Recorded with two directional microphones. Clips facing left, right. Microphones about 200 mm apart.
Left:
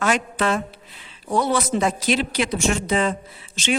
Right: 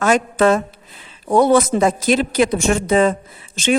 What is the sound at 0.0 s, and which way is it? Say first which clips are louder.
A woman's voice: right 7 dB; 45° right (ahead or behind).